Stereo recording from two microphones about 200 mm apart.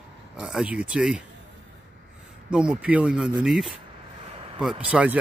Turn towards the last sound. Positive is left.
turn(degrees=-5)  # may be behind; listen again after turning